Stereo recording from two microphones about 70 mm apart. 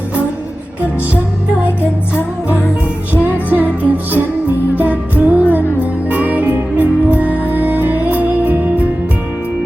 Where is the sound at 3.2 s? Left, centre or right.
Right.